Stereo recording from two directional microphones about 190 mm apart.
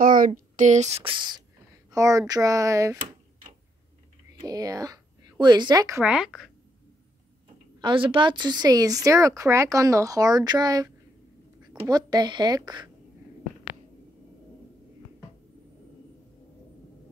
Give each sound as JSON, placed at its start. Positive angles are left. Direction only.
{"t": 0.0, "sound": "speech", "side_deg": -45}
{"t": 4.4, "sound": "a woman's voice", "side_deg": -20}
{"t": 6.0, "sound": "a woman's voice", "side_deg": 0}
{"t": 7.8, "sound": "a woman's voice", "side_deg": -25}
{"t": 11.9, "sound": "a woman's voice", "side_deg": -20}